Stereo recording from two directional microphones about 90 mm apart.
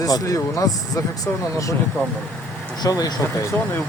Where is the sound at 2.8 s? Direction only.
45° left (ahead or behind).